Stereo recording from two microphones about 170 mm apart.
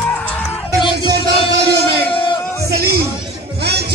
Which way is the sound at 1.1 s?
75° right (ahead or behind).